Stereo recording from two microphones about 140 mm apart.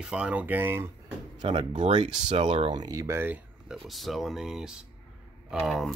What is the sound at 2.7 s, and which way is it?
Speech, 25° right (ahead or behind).